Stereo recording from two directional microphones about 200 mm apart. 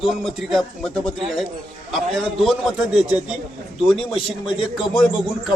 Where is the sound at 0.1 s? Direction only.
Centre (ahead or behind).